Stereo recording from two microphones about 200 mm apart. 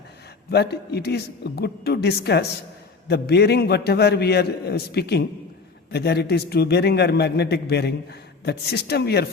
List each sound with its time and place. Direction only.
0.5 s a man's voice: 55° left (ahead or behind)